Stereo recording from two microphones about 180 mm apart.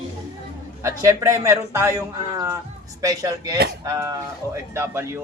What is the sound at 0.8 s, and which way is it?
A man's voice, 15° right (ahead or behind).